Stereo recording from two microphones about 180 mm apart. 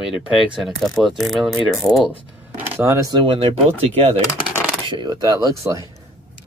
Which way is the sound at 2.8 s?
15° right (ahead or behind).